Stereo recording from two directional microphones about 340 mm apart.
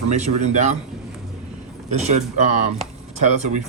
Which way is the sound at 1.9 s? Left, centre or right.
Centre.